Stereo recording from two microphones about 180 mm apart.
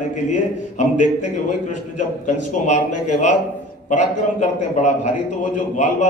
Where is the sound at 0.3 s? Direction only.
40° left (ahead or behind).